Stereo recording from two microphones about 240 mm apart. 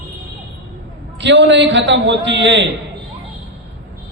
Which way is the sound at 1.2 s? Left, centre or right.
Right.